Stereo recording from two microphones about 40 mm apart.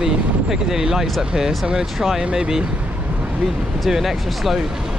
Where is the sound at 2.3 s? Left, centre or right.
Centre.